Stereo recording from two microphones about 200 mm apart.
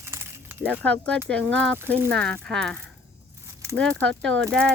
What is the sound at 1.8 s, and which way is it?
Speech, 10° right (ahead or behind).